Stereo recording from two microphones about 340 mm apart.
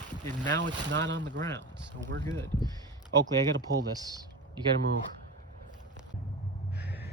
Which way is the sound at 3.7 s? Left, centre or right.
Centre.